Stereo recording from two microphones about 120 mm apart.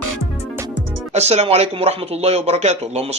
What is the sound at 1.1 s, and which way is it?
Speech, 65° right (ahead or behind).